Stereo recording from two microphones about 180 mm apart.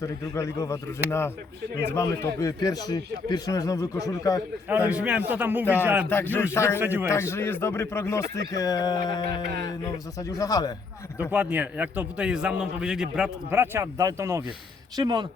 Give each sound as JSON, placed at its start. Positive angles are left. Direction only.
{"t": 0.0, "sound": "a man's voice", "side_deg": 15}
{"t": 4.7, "sound": "a man's voice", "side_deg": -10}
{"t": 6.1, "sound": "a man's voice", "side_deg": 10}
{"t": 6.7, "sound": "a man's voice", "side_deg": -10}
{"t": 7.1, "sound": "a man's voice", "side_deg": 15}
{"t": 11.3, "sound": "a man's voice", "side_deg": -10}